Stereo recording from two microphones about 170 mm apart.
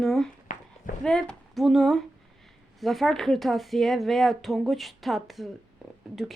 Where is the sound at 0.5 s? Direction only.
45° left (ahead or behind).